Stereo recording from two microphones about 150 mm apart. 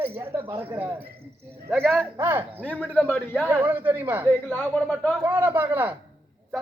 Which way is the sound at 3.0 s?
10° left (ahead or behind).